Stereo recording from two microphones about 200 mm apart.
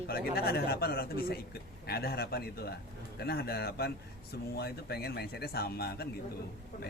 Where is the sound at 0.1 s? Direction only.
50° left (ahead or behind).